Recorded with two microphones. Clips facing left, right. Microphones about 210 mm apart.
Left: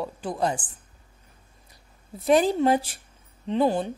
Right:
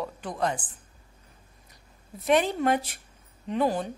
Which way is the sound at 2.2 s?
35° left (ahead or behind).